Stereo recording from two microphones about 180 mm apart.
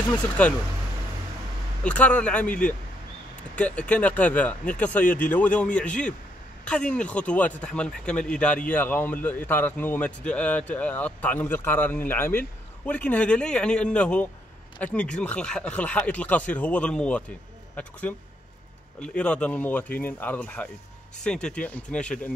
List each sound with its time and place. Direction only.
0.4 s speech: 10° left (ahead or behind)
1.8 s speech: 5° left (ahead or behind)